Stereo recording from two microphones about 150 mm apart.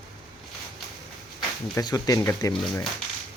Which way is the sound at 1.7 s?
25° left (ahead or behind).